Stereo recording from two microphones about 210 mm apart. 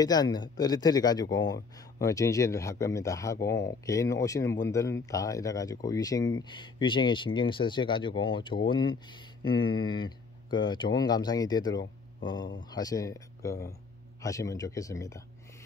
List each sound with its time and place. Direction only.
0.0 s speech: 20° left (ahead or behind)